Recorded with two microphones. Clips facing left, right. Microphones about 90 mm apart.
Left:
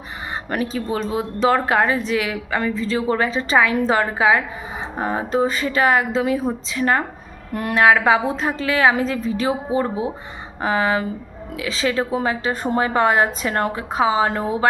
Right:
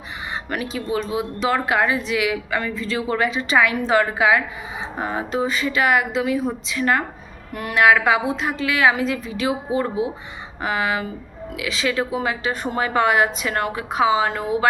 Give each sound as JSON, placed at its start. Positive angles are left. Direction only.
{"t": 0.5, "sound": "a woman's voice", "side_deg": 40}